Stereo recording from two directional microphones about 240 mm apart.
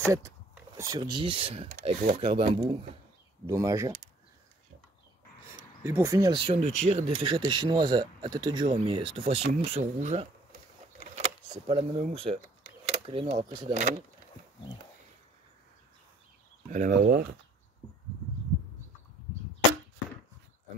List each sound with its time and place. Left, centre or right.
0.7 s speech: centre
5.9 s speech: centre; by 10.2 s right
11.5 s speech: right
16.7 s speech: right